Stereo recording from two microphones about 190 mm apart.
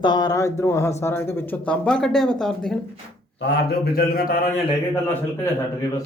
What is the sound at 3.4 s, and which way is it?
A man's voice, 60° left (ahead or behind).